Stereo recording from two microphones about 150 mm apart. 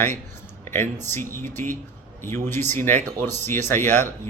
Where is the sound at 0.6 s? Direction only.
15° left (ahead or behind).